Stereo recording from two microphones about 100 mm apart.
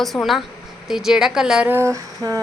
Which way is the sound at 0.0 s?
Centre (ahead or behind).